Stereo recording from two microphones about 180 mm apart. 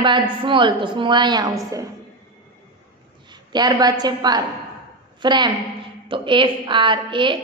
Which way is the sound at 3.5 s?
20° right (ahead or behind).